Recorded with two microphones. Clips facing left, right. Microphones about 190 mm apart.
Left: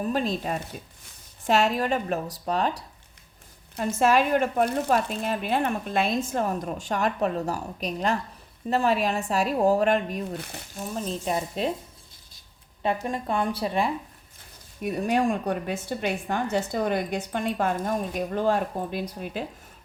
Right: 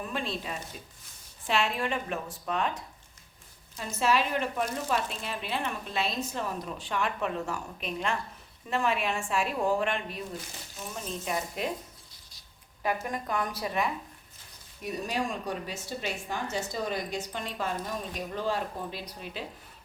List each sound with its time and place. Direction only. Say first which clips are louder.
0.0 s a woman's voice: left 8 dB; 40° left (ahead or behind)
3.8 s a woman's voice: left 6 dB; 50° left (ahead or behind)
10.3 s speech: left 5 dB; 60° left (ahead or behind)
10.8 s a woman's voice: left 7 dB; 35° left (ahead or behind)
12.8 s speech: left 4 dB; 25° left (ahead or behind)
14.8 s speech: left 8 dB; 55° left (ahead or behind)